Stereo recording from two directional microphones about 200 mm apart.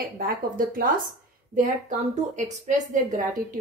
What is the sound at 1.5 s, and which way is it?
A woman's voice, 35° right (ahead or behind).